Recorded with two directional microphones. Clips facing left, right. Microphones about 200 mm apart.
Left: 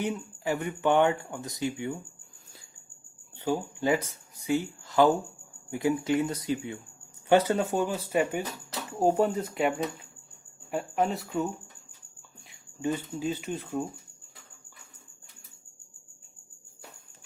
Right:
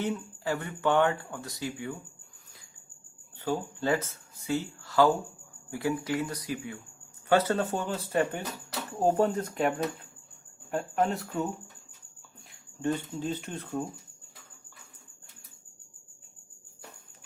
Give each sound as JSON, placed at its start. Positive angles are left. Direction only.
{"t": 0.0, "sound": "speech", "side_deg": 15}
{"t": 3.3, "sound": "speech", "side_deg": 15}
{"t": 12.8, "sound": "speech", "side_deg": 5}